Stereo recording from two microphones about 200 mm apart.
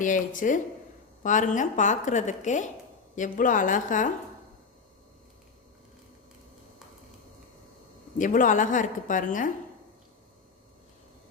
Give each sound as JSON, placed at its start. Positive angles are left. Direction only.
{"t": 0.0, "sound": "a woman's voice", "side_deg": 40}
{"t": 8.2, "sound": "a woman's voice", "side_deg": 40}